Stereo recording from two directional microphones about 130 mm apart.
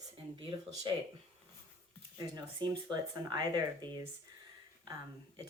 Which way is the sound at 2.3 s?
35° right (ahead or behind).